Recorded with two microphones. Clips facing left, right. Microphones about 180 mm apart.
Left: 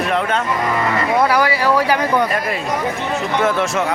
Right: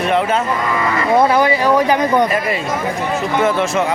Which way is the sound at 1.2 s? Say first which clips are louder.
Right 3 dB; 20° right (ahead or behind).